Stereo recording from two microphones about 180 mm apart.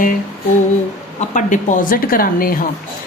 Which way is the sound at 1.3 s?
45° left (ahead or behind).